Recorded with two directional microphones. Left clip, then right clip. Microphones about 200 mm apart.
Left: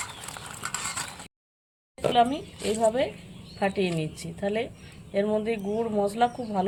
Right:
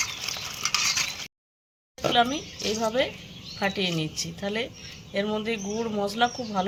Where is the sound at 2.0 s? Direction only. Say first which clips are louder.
Even; 20° left (ahead or behind).